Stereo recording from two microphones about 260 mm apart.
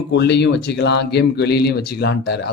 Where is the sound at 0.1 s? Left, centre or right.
Left.